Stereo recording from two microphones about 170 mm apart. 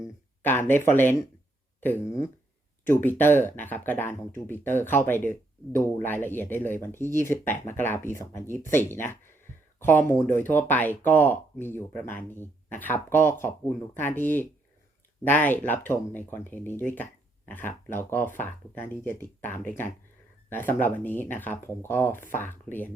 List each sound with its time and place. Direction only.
0.9 s speech: 10° left (ahead or behind)
16.9 s a sound: 10° left (ahead or behind)
17.7 s speech: 15° left (ahead or behind)